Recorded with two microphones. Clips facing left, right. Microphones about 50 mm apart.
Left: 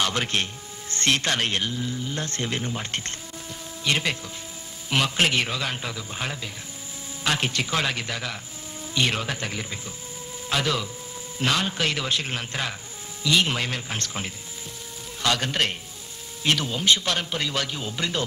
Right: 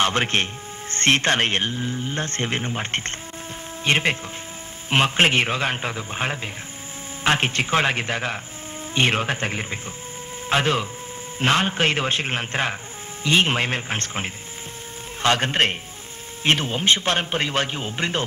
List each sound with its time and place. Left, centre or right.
0.0 s speech: right